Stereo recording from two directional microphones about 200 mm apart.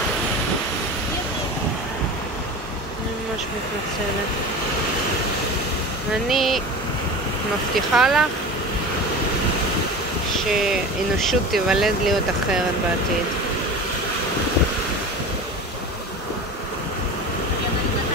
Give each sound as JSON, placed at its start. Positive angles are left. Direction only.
{"t": 6.2, "sound": "speech", "side_deg": 0}
{"t": 7.9, "sound": "speech", "side_deg": 0}
{"t": 10.7, "sound": "speech", "side_deg": 0}